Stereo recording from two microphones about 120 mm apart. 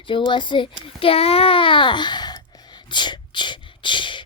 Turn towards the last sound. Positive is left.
turn(degrees=40)  # may be behind; listen again after turning